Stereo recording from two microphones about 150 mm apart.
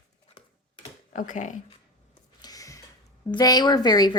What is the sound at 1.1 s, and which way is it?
Speech, 60° left (ahead or behind).